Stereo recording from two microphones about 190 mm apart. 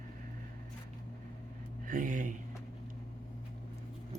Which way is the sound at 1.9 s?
45° right (ahead or behind).